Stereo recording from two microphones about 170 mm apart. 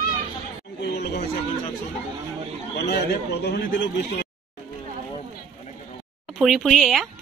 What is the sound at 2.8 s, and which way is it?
A man's voice, 75° left (ahead or behind).